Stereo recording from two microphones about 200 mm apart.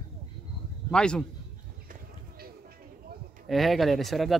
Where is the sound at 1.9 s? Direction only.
50° right (ahead or behind).